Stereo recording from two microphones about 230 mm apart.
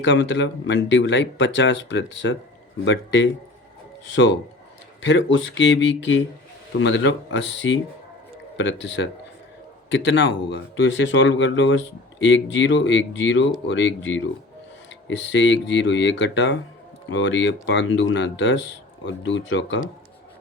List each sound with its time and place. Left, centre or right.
0.0 s speech: left
10.5 s speech: left